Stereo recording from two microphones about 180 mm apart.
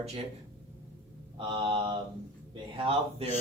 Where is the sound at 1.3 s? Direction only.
30° right (ahead or behind).